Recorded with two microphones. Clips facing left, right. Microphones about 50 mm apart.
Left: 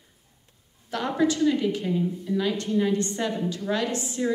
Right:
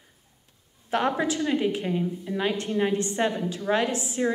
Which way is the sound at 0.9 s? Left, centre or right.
Right.